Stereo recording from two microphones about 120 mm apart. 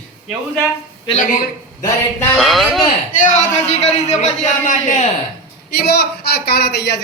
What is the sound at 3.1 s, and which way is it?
A man's voice, 90° left.